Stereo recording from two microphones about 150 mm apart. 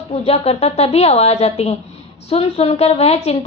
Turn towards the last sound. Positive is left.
turn(degrees=45)  # may be behind; listen again after turning